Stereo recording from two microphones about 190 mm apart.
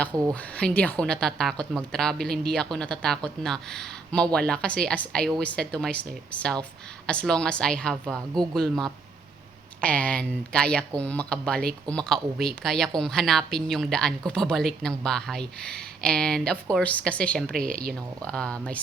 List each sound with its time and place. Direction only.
0.5 s a woman's voice: 5° left (ahead or behind)
9.8 s a woman's voice: 5° left (ahead or behind)
17.5 s speech: 50° right (ahead or behind)
18.2 s a woman's voice: 5° left (ahead or behind)